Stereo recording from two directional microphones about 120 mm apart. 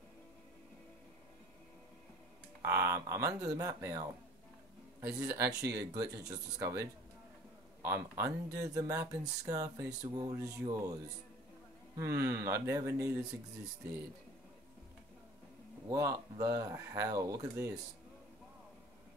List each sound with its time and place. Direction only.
2.6 s speech: 25° right (ahead or behind)
12.0 s speech: 25° right (ahead or behind)
15.9 s speech: 25° right (ahead or behind)